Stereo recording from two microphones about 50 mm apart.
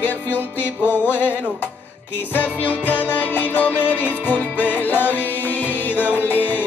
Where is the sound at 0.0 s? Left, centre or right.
Left.